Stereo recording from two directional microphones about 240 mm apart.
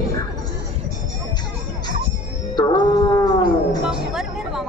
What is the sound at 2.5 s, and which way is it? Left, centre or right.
Music, centre.